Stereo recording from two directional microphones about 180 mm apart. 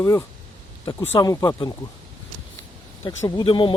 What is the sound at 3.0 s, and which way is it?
Speech, 25° left (ahead or behind).